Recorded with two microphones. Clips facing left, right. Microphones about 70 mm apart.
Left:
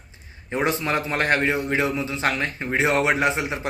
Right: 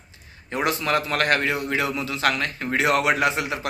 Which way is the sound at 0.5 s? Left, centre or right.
Left.